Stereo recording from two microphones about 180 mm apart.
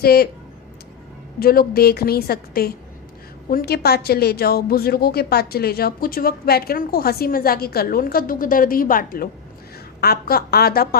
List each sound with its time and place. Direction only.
0.0 s a woman's voice: 60° left (ahead or behind)
1.4 s a woman's voice: 55° left (ahead or behind)